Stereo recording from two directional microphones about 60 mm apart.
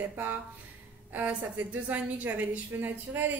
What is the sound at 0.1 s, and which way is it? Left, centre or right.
A woman's voice, right.